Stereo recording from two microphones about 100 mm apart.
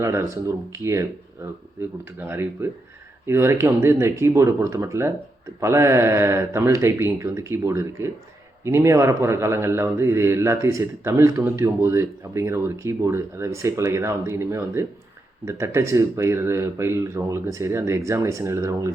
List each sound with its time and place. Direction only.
0.0 s speech: 30° right (ahead or behind)